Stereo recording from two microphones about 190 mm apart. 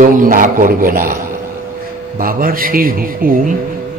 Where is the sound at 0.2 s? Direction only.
45° right (ahead or behind).